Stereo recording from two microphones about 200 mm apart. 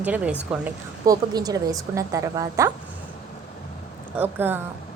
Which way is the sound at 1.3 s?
20° right (ahead or behind).